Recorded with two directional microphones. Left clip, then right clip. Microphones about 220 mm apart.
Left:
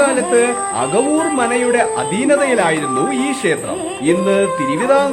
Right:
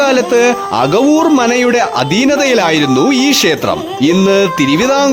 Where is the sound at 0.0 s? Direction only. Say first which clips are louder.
Right 4 dB; 50° right (ahead or behind).